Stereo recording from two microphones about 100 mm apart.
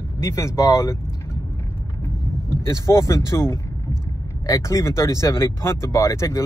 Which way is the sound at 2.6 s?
30° left (ahead or behind).